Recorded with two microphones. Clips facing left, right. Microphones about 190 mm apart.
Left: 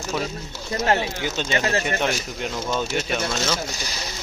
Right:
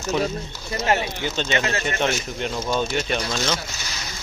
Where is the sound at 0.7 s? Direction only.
15° right (ahead or behind).